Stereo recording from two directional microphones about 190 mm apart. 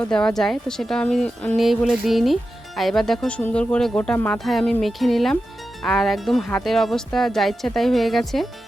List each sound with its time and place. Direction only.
0.0 s speech: 5° left (ahead or behind)